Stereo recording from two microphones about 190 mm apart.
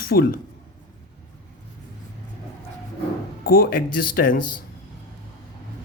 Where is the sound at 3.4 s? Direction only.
50° left (ahead or behind).